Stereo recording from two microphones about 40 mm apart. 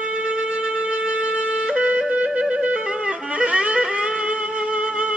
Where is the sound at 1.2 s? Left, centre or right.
Right.